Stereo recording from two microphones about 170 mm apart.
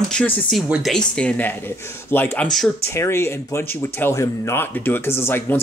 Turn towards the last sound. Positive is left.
turn(degrees=15)  # may be behind; listen again after turning